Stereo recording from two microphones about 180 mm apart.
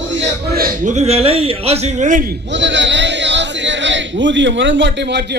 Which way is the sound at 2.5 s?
90° right.